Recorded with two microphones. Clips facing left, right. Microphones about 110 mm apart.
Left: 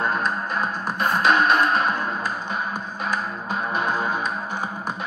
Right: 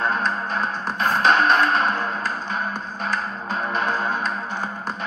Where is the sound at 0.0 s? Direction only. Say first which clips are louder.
Right 1 dB; 10° left (ahead or behind).